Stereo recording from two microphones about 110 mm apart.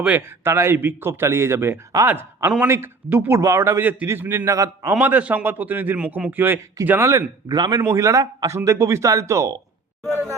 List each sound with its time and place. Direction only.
0.0 s a man's voice: 20° right (ahead or behind)
4.9 s a man's voice: 15° right (ahead or behind)
7.4 s a man's voice: 40° right (ahead or behind)
7.8 s a man's voice: 25° right (ahead or behind)